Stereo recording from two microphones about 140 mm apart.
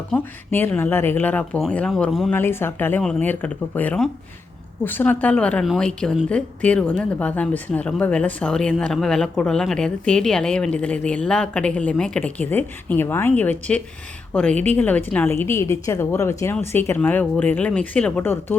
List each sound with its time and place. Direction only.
0.1 s speech: 10° left (ahead or behind)
2.3 s speech: 15° left (ahead or behind)